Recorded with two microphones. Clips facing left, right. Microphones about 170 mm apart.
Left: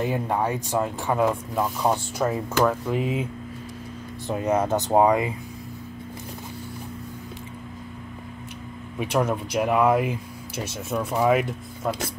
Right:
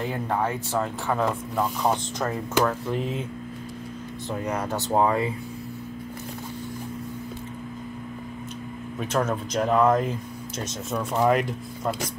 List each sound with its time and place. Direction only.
0.0 s speech: 15° left (ahead or behind)
4.3 s speech: 20° left (ahead or behind)
9.0 s speech: 10° left (ahead or behind)